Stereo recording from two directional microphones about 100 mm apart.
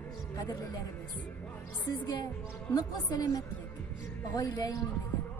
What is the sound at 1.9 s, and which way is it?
A man's voice, 40° left (ahead or behind).